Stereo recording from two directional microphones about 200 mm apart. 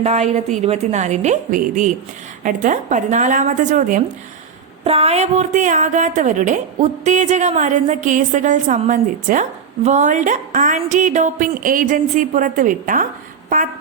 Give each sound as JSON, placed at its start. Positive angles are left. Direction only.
{"t": 0.0, "sound": "a woman's voice", "side_deg": -35}